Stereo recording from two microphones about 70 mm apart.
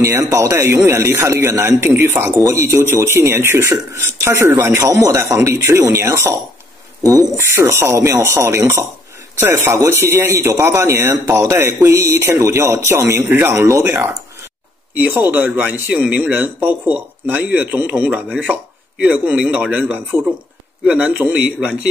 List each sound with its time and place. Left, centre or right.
0.0 s speech: right
7.3 s speech: right
11.8 s speech: right
15.1 s speech: right
18.1 s a man's voice: centre